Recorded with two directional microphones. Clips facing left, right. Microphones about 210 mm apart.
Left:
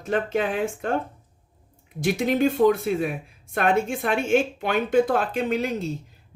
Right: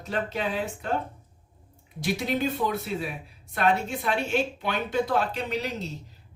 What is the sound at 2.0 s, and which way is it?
A woman's voice, 50° left (ahead or behind).